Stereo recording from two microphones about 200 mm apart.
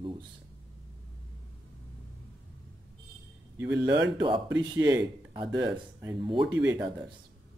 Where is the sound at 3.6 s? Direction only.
10° right (ahead or behind).